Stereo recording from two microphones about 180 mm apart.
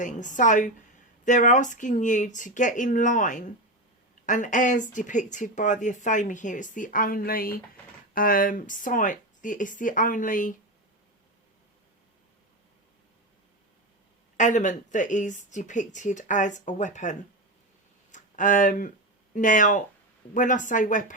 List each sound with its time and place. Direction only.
0.0 s speech: 45° left (ahead or behind)
14.3 s speech: 45° left (ahead or behind)
18.1 s a sound: 45° left (ahead or behind)
19.3 s speech: 45° left (ahead or behind)